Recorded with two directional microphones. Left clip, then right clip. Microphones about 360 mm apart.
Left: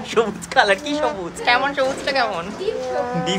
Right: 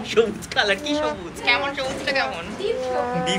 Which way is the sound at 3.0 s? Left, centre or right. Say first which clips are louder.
Even; centre.